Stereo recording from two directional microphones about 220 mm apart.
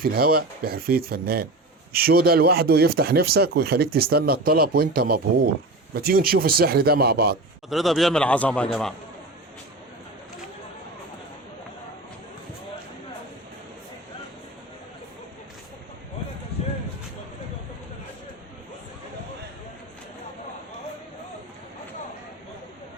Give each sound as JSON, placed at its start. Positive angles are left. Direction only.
{"t": 0.0, "sound": "speech", "side_deg": -40}
{"t": 7.7, "sound": "a man's voice", "side_deg": 0}